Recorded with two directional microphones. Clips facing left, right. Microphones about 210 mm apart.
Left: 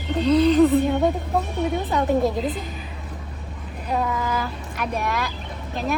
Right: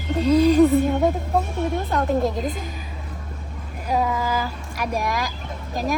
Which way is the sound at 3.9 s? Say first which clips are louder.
Right 2 dB; 5° right (ahead or behind).